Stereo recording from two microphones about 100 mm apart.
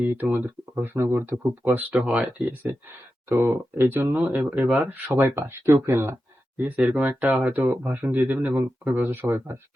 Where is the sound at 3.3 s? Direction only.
25° right (ahead or behind).